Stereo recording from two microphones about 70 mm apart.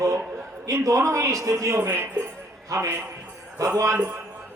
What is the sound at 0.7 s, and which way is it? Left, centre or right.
A man's voice, right.